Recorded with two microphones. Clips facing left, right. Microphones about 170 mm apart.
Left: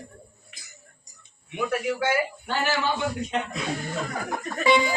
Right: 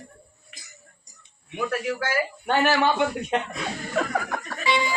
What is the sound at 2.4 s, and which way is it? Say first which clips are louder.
A man's voice: right 10 dB; 60° right (ahead or behind).